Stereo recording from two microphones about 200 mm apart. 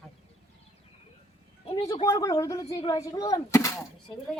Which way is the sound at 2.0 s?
15° left (ahead or behind).